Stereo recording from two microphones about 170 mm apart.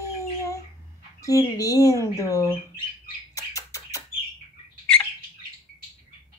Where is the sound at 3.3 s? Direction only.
20° left (ahead or behind).